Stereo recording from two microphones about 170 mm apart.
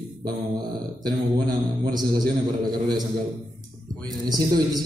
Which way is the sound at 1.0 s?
25° right (ahead or behind).